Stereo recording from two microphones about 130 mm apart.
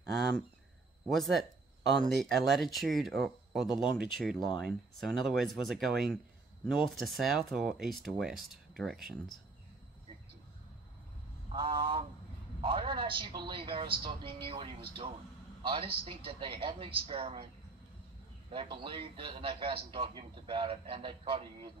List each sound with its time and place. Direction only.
1.0 s speech: centre (ahead or behind)
11.5 s a man's voice: 40° right (ahead or behind)
18.5 s a man's voice: 40° right (ahead or behind)